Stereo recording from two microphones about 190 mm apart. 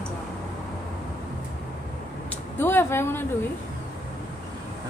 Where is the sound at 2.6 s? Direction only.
10° left (ahead or behind).